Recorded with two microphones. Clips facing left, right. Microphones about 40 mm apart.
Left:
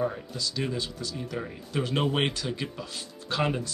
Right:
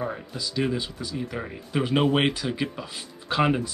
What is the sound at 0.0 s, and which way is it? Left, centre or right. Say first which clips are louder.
Speech: left 1 dB; centre.